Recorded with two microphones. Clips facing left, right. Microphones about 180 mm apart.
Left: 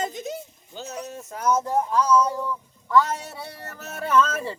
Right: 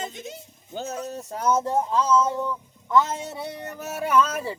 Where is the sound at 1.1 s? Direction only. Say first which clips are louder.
Even; 35° right (ahead or behind).